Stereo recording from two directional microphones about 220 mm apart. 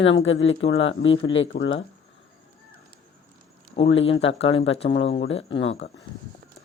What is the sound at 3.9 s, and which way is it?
Speech, 60° left (ahead or behind).